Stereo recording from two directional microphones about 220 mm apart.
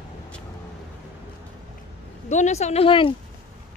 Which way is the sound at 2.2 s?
30° left (ahead or behind).